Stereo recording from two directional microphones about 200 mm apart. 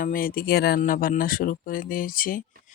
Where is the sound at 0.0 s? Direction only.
45° left (ahead or behind).